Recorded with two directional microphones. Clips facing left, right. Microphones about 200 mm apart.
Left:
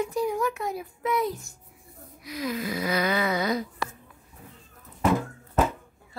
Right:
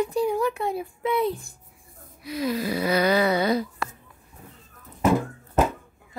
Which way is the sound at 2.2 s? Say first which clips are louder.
Right 4 dB; 30° right (ahead or behind).